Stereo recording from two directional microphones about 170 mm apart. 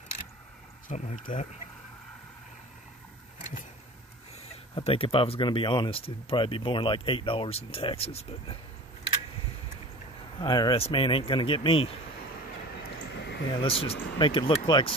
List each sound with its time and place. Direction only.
0.8 s speech: 50° left (ahead or behind)
4.7 s speech: 35° left (ahead or behind)
10.4 s speech: 25° left (ahead or behind)
12.8 s a sound: 90° left
13.5 s speech: 30° left (ahead or behind)